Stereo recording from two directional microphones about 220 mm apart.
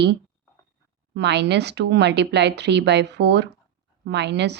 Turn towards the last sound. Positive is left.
turn(degrees=-50)  # may be behind; listen again after turning